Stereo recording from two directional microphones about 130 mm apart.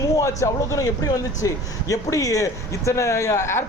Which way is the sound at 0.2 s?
25° left (ahead or behind).